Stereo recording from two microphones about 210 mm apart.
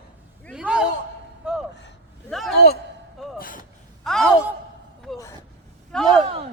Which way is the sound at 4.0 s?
Centre (ahead or behind).